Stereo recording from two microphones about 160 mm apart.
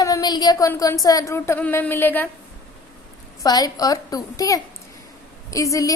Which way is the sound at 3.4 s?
25° left (ahead or behind).